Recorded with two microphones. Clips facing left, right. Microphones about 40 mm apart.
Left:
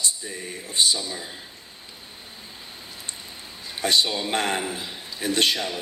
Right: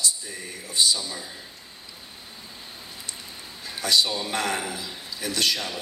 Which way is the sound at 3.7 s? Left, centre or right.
Left.